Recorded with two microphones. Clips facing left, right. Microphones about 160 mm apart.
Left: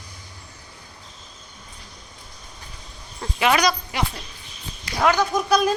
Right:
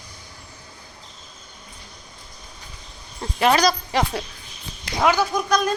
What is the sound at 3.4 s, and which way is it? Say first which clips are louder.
Speech: right 2 dB; 35° right (ahead or behind).